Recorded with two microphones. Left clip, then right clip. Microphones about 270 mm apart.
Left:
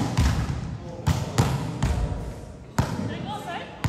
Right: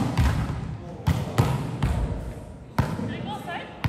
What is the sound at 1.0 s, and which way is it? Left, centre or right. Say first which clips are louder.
Basketball bounce: even; left.